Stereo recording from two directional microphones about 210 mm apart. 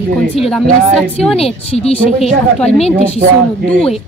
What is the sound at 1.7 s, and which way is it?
A woman's voice, 30° left (ahead or behind).